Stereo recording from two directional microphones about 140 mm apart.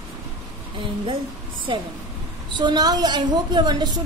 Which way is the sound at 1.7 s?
40° right (ahead or behind).